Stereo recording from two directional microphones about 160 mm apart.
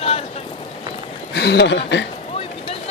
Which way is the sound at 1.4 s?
90° left.